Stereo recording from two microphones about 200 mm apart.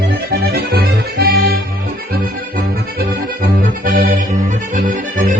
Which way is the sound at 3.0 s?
50° right (ahead or behind).